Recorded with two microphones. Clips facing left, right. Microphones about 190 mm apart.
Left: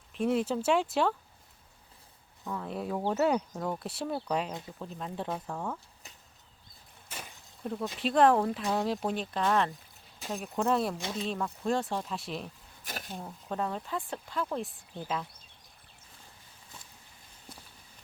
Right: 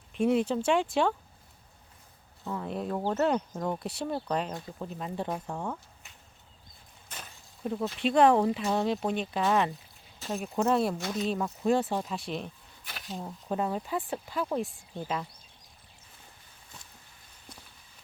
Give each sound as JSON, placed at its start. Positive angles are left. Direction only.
{"t": 0.1, "sound": "speech", "side_deg": 0}
{"t": 2.4, "sound": "speech", "side_deg": 0}
{"t": 7.1, "sound": "a sound", "side_deg": 10}
{"t": 7.6, "sound": "speech", "side_deg": -5}
{"t": 10.9, "sound": "speech", "side_deg": 25}
{"t": 11.6, "sound": "speech", "side_deg": -5}
{"t": 12.8, "sound": "speech", "side_deg": 45}
{"t": 13.2, "sound": "speech", "side_deg": -10}